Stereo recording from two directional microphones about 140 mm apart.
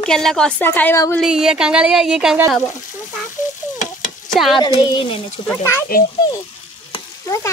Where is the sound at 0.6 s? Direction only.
15° left (ahead or behind).